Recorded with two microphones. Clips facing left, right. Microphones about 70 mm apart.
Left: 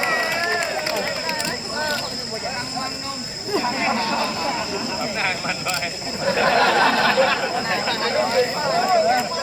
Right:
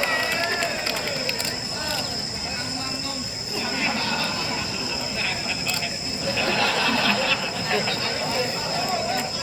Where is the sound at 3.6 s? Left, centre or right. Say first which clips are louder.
Left 2 dB; left.